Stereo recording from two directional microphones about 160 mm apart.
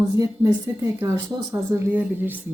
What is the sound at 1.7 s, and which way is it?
Speech, 10° right (ahead or behind).